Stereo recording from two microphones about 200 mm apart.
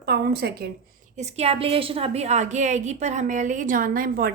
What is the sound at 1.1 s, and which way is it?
A woman's voice, 35° right (ahead or behind).